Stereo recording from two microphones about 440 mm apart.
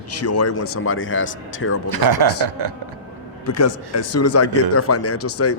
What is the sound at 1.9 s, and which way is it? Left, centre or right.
Speech, right.